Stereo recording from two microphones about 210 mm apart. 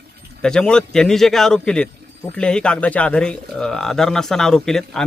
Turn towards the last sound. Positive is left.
turn(degrees=0)  # may be behind; listen again after turning